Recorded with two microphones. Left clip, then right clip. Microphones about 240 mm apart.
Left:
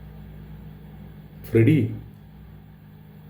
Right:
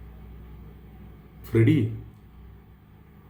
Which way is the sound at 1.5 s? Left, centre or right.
Centre.